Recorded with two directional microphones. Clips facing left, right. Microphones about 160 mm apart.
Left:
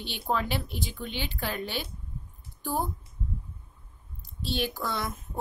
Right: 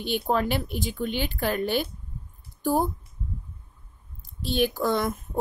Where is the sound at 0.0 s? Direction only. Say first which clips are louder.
Right 5 dB; 50° right (ahead or behind).